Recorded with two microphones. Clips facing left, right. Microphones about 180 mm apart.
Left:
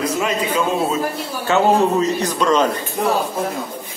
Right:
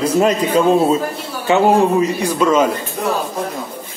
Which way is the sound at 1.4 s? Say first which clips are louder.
Right 3 dB; 15° right (ahead or behind).